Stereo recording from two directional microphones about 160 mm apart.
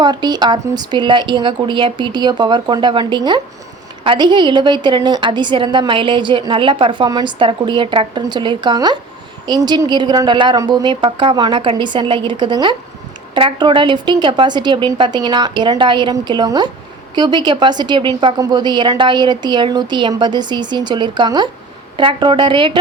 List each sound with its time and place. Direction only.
0.0 s a woman's voice: 25° right (ahead or behind)